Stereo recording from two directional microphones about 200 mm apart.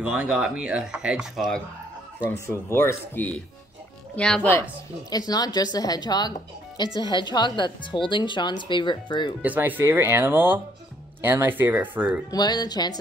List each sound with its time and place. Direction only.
0.0 s speech: 5° right (ahead or behind)
2.4 s speech: 10° left (ahead or behind)
5.1 s speech: 20° left (ahead or behind)
9.4 s speech: 10° right (ahead or behind)
12.3 s speech: 20° left (ahead or behind)